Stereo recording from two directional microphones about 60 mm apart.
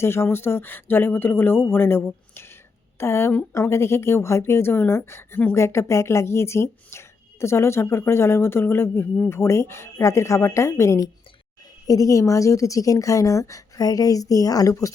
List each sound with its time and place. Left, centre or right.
0.0 s speech: left
2.3 s a sound: left
3.0 s speech: left
11.9 s a woman's voice: left